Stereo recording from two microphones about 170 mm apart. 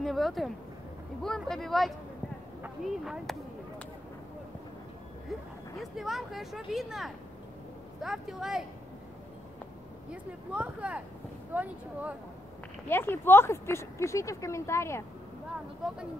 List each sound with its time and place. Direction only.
0.0 s speech: centre (ahead or behind)
5.8 s speech: centre (ahead or behind)
10.5 s speech: 5° right (ahead or behind)
12.8 s speech: 15° left (ahead or behind)
15.8 s speech: 5° right (ahead or behind)